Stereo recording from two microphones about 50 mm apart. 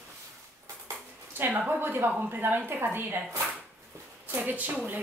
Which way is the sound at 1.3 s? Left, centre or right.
Right.